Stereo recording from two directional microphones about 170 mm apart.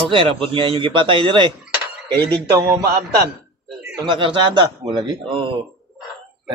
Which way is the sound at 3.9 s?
30° right (ahead or behind).